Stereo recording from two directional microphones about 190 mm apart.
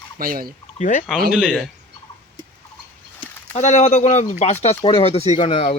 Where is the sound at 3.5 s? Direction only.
35° left (ahead or behind).